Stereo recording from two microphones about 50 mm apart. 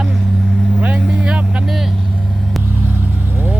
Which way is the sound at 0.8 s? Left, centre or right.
Right.